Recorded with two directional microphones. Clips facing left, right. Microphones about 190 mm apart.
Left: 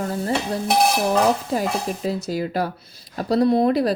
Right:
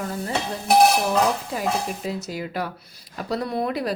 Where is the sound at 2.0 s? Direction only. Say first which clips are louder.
Left 5 dB; 35° left (ahead or behind).